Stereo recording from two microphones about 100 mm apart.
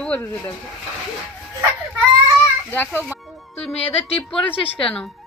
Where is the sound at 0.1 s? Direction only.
20° left (ahead or behind).